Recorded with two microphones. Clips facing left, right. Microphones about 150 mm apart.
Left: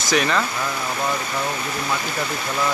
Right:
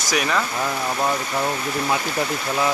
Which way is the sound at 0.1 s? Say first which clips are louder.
Left 2 dB; 10° right (ahead or behind).